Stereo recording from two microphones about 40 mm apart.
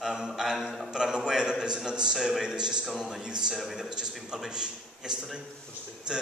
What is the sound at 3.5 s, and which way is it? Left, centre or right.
Speech, centre.